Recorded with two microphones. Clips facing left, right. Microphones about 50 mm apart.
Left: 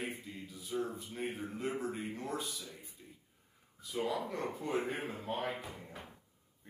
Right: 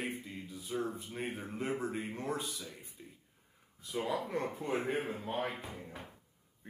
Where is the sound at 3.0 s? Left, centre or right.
Centre.